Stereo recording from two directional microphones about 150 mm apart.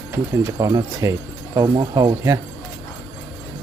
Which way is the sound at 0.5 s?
25° right (ahead or behind).